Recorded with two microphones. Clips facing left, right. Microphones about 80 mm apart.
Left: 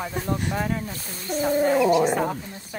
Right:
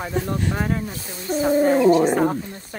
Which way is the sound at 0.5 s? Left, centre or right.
Right.